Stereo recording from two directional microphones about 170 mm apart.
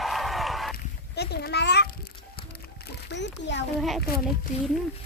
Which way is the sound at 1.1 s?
75° left (ahead or behind).